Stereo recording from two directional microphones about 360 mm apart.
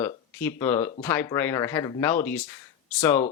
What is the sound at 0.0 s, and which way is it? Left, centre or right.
Speech, centre.